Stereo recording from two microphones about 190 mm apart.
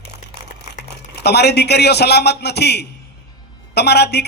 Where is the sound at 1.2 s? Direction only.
60° left (ahead or behind).